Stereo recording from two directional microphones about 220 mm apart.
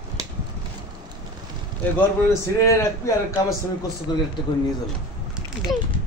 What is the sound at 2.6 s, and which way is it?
A man's voice, 15° left (ahead or behind).